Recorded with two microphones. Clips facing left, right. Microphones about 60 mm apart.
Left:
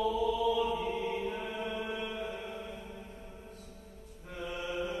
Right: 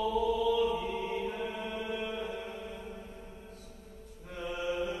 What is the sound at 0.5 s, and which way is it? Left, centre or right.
Music, left.